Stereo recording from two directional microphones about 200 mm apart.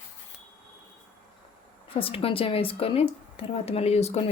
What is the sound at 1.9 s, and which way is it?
Speech, 30° left (ahead or behind).